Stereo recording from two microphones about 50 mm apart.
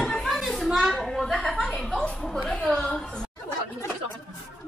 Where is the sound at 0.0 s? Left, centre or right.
Centre.